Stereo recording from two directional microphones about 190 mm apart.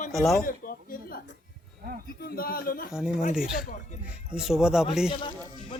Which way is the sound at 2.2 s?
50° left (ahead or behind).